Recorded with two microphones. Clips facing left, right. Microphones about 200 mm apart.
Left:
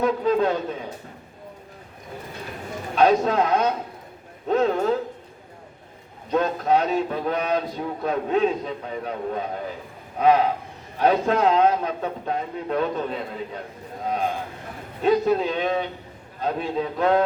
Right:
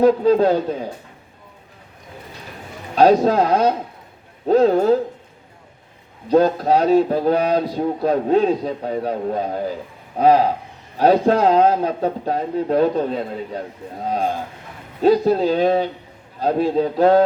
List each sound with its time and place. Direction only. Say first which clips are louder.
0.0 s a man's voice: right 7 dB; 35° right (ahead or behind)
2.9 s a man's voice: right 5 dB; 35° right (ahead or behind)
6.2 s a man's voice: right 7 dB; 35° right (ahead or behind)
15.0 s a man's voice: right 5 dB; 35° right (ahead or behind)